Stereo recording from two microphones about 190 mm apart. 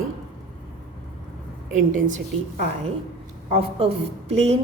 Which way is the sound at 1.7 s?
40° right (ahead or behind).